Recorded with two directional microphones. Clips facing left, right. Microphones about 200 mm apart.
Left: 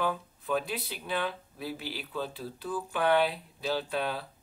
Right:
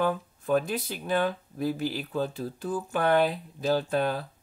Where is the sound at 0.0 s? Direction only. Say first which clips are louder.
Right 4 dB; 45° right (ahead or behind).